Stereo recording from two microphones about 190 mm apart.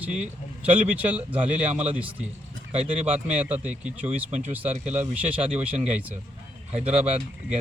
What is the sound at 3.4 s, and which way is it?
A man's voice, 10° right (ahead or behind).